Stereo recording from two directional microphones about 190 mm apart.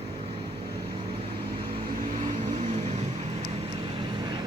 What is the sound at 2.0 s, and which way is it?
Vehicle, 40° right (ahead or behind).